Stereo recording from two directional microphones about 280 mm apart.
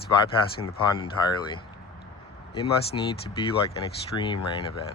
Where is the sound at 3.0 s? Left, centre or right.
Centre.